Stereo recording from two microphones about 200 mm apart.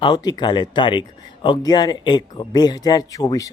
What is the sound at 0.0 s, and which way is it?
Speech, 20° left (ahead or behind).